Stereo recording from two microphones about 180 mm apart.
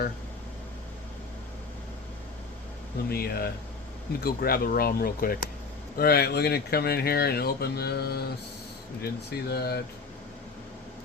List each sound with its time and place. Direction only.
3.1 s speech: 60° left (ahead or behind)